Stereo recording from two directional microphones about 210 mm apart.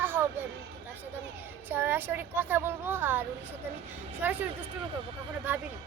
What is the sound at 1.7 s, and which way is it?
A woman's voice, 10° right (ahead or behind).